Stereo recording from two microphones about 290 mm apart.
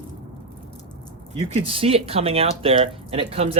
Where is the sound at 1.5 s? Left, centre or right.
Centre.